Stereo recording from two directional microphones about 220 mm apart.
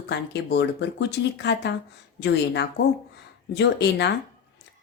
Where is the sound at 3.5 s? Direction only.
50° left (ahead or behind).